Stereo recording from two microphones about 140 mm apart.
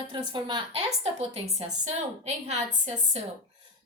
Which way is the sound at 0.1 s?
35° right (ahead or behind).